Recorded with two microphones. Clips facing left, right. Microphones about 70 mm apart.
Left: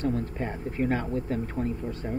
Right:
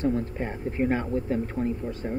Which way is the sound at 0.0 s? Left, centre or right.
Right.